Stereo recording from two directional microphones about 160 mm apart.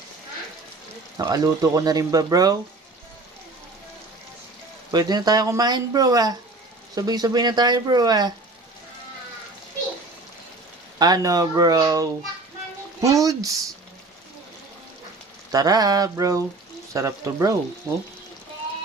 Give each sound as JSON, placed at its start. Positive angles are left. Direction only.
{"t": 1.1, "sound": "speech", "side_deg": -25}
{"t": 4.9, "sound": "speech", "side_deg": -25}
{"t": 10.9, "sound": "speech", "side_deg": -25}
{"t": 15.5, "sound": "speech", "side_deg": -25}